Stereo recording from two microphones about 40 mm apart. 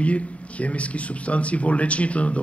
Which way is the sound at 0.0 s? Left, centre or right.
Left.